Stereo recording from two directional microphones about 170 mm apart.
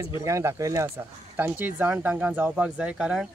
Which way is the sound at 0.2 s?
15° right (ahead or behind).